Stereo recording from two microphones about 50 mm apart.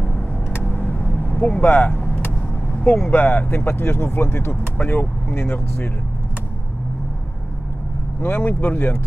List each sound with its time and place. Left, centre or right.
0.0 s vehicle: left
3.1 s speech: left
8.2 s speech: left